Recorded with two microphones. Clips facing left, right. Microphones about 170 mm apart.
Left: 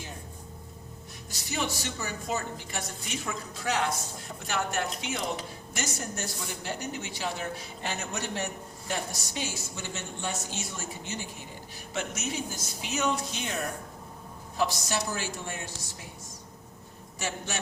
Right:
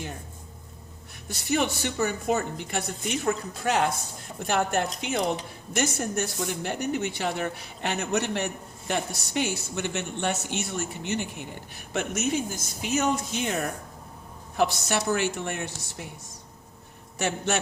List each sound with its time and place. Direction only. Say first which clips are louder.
1.3 s speech: right 7 dB; 60° right (ahead or behind)
14.5 s speech: right 4 dB; 60° right (ahead or behind)
17.2 s speech: right 8 dB; 65° right (ahead or behind)